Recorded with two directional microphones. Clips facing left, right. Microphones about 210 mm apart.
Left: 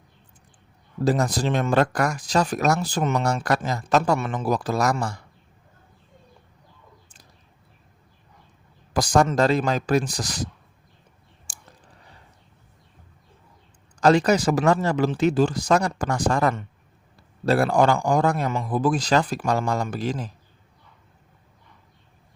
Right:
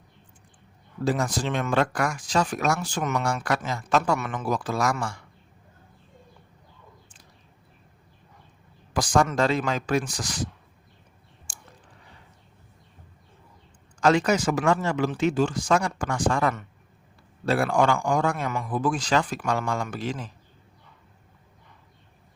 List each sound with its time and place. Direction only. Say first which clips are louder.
1.0 s speech: left 4 dB; 40° left (ahead or behind)
8.9 s speech: left 3 dB; 40° left (ahead or behind)
11.5 s clicking: right 1 dB; 40° left (ahead or behind)
14.0 s speech: left 3 dB; 35° left (ahead or behind)